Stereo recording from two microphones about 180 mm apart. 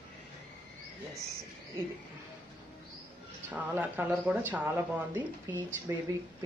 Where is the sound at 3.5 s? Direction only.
10° right (ahead or behind).